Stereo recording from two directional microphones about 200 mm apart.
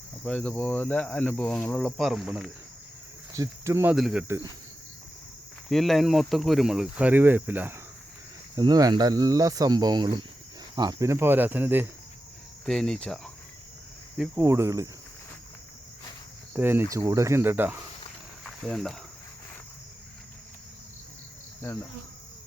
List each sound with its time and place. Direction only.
0.3 s speech: 5° left (ahead or behind)
3.3 s cricket: 15° right (ahead or behind)
3.9 s speech: 5° right (ahead or behind)
5.6 s speech: centre (ahead or behind); by 10.2 s 20° right (ahead or behind)
10.8 s cricket: 15° right (ahead or behind)
12.6 s speech: centre (ahead or behind)
14.2 s cricket: 10° right (ahead or behind)
16.6 s cricket: 10° right (ahead or behind)
18.4 s speech: centre (ahead or behind)